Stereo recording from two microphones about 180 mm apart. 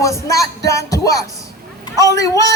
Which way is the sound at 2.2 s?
20° left (ahead or behind).